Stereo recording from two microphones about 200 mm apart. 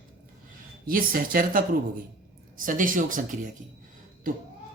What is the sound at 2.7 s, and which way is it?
Speech, 40° right (ahead or behind).